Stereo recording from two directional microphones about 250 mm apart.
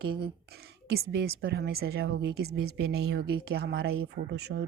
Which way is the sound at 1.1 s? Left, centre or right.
Right.